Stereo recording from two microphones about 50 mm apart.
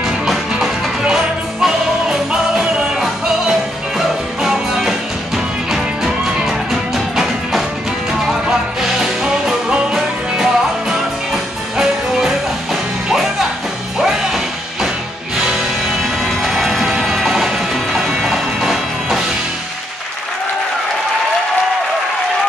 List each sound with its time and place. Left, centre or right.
1.0 s music: centre
4.4 s music: centre
16.3 s music: centre